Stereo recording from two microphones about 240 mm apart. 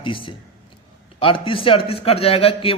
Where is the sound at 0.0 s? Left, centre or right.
Left.